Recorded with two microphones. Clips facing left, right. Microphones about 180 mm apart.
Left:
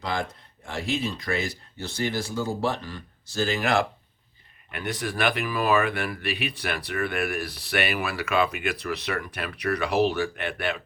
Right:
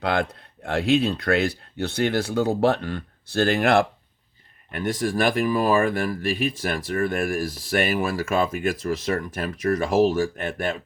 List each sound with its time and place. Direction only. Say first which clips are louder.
0.0 s speech: right 6 dB; 65° right (ahead or behind)
4.7 s speech: right 6 dB; 45° right (ahead or behind)